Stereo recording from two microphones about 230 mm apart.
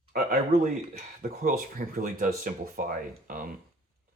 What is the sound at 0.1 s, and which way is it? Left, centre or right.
Speech, right.